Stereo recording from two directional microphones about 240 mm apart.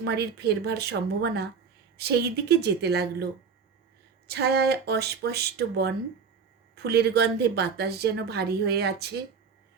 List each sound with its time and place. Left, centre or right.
0.0 s a woman's voice: right
4.3 s a woman's voice: right